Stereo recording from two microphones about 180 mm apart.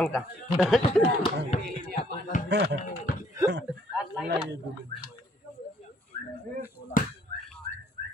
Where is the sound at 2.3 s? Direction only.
45° left (ahead or behind).